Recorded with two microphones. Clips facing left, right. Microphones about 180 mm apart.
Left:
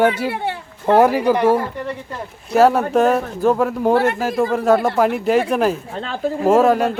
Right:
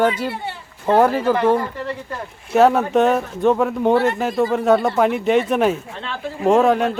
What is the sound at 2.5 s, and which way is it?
Speech, centre (ahead or behind).